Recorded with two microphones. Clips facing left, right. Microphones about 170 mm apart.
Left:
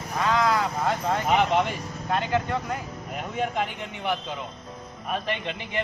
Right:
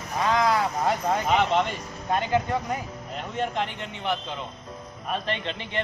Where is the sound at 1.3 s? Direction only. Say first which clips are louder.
Left 1 dB; 10° left (ahead or behind).